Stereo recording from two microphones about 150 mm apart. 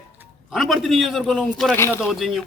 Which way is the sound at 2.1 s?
Centre (ahead or behind).